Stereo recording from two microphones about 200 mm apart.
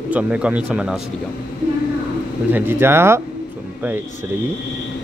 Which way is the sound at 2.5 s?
10° right (ahead or behind).